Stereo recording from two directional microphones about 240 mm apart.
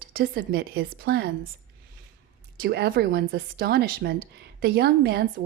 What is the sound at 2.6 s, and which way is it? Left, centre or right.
A woman's voice, right.